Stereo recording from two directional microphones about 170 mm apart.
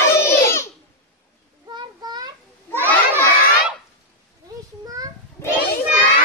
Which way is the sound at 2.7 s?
10° left (ahead or behind).